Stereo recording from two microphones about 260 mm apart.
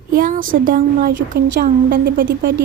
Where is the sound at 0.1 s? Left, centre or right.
Right.